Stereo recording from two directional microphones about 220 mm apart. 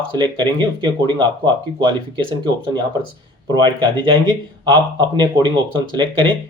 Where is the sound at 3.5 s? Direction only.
20° right (ahead or behind).